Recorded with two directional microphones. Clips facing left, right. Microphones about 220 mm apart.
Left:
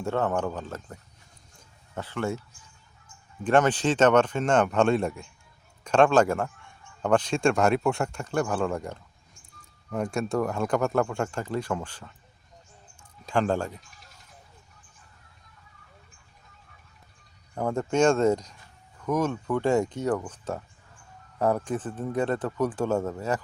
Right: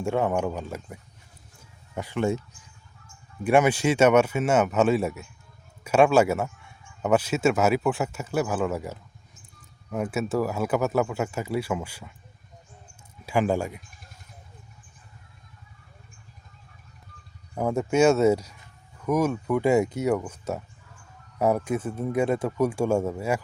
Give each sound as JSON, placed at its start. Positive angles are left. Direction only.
{"t": 0.0, "sound": "speech", "side_deg": -10}
{"t": 1.5, "sound": "a sound", "side_deg": -15}
{"t": 3.4, "sound": "speech", "side_deg": -10}
{"t": 17.5, "sound": "speech", "side_deg": -5}